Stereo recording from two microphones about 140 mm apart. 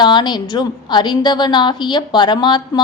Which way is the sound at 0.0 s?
30° left (ahead or behind).